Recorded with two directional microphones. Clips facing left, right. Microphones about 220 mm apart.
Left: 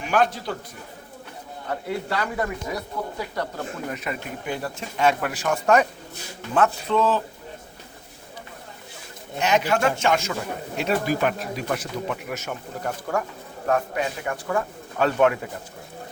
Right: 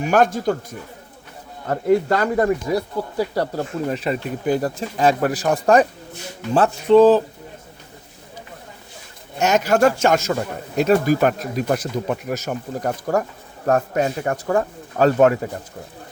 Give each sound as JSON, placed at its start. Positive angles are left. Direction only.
{"t": 0.0, "sound": "a man's voice", "side_deg": -45}
{"t": 1.6, "sound": "speech", "side_deg": -45}
{"t": 6.9, "sound": "speech", "side_deg": -35}
{"t": 9.4, "sound": "a man's voice", "side_deg": -45}